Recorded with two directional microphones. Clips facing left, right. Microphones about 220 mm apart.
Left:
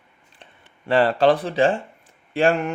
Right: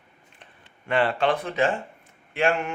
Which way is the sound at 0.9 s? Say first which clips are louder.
Left 6 dB; 35° left (ahead or behind).